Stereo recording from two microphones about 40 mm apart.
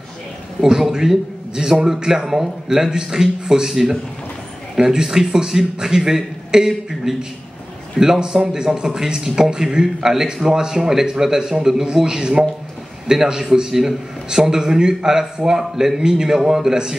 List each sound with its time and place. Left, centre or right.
0.6 s a man's voice: centre